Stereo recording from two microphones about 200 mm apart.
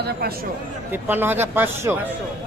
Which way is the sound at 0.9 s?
10° right (ahead or behind).